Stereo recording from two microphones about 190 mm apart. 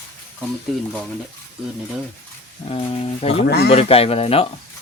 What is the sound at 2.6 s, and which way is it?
Speech, 30° left (ahead or behind).